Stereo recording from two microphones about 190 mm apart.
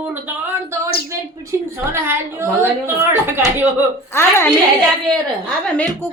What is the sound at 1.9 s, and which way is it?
A woman's voice, 15° right (ahead or behind).